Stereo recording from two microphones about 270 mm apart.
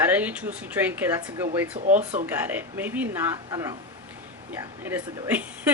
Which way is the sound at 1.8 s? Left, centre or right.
Right.